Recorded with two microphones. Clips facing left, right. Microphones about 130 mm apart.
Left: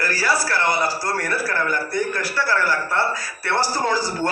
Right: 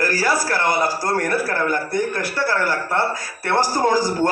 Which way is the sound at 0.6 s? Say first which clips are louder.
Right 2 dB; 20° right (ahead or behind).